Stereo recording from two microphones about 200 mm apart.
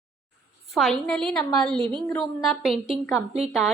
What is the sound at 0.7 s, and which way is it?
A woman's voice, centre (ahead or behind).